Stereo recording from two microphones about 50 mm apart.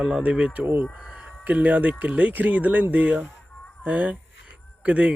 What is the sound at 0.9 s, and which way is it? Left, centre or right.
Speech, right.